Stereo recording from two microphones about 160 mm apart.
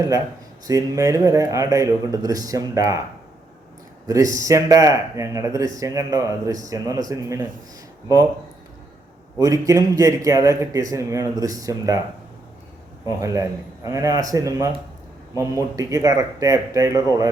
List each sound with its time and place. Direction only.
0.7 s speech: 20° right (ahead or behind)
4.0 s speech: 20° right (ahead or behind)
9.4 s speech: 20° right (ahead or behind)
13.1 s speech: 20° right (ahead or behind)
15.7 s speech: 20° right (ahead or behind)